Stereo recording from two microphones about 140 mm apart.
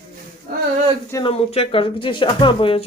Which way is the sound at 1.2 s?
45° left (ahead or behind).